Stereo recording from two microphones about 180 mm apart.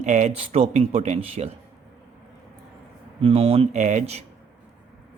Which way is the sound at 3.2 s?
35° right (ahead or behind).